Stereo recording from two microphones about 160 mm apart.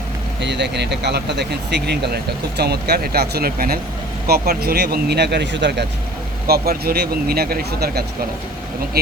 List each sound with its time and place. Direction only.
0.4 s speech: 90° right
6.5 s speech: 75° right (ahead or behind)